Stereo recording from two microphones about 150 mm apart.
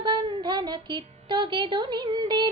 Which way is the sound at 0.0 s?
30° right (ahead or behind).